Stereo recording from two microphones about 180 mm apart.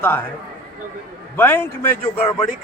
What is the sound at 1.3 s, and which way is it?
Speech, 10° left (ahead or behind).